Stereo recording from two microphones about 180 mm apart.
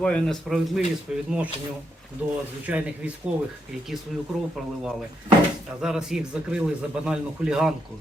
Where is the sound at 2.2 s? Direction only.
5° right (ahead or behind).